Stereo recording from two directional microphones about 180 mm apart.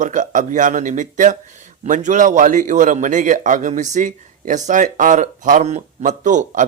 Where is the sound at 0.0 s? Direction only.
45° right (ahead or behind).